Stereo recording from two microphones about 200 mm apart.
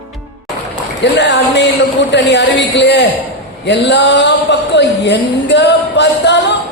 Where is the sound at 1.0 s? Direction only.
60° left (ahead or behind).